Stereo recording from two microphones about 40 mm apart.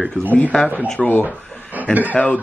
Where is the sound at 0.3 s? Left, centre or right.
Left.